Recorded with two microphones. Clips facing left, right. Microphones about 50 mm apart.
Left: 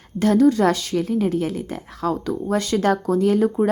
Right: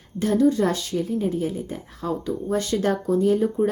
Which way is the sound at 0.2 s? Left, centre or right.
Left.